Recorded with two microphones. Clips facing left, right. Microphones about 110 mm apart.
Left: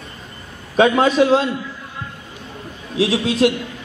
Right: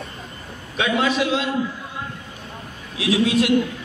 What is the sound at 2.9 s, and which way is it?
Speech, 35° left (ahead or behind).